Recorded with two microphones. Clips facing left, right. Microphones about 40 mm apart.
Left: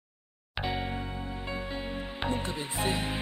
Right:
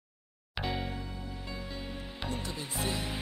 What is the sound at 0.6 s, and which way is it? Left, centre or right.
Music, centre.